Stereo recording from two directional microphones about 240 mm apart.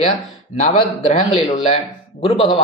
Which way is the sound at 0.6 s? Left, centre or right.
Left.